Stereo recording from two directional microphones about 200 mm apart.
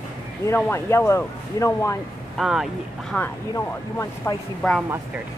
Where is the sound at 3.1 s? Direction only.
10° left (ahead or behind).